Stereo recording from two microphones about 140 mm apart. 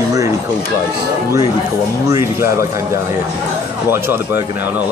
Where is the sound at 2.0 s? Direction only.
20° right (ahead or behind).